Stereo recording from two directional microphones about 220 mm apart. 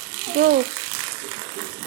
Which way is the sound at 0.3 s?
50° right (ahead or behind).